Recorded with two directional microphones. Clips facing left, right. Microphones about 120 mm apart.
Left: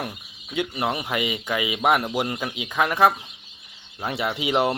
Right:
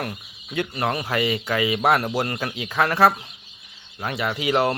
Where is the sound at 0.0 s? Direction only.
10° left (ahead or behind).